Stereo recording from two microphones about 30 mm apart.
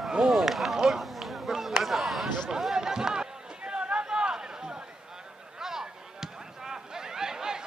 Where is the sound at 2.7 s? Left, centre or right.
Right.